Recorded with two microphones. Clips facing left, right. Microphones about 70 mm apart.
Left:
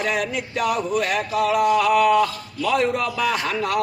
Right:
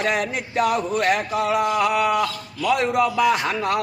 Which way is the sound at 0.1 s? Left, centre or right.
Right.